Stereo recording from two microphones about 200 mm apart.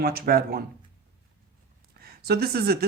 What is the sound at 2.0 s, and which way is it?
Speech, 50° right (ahead or behind).